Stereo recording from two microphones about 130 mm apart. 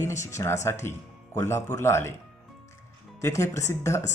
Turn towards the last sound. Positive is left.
turn(degrees=20)  # may be behind; listen again after turning